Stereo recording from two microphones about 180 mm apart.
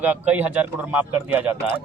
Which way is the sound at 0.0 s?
10° right (ahead or behind).